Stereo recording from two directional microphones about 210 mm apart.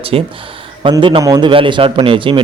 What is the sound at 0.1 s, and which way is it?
A man's voice, 25° right (ahead or behind).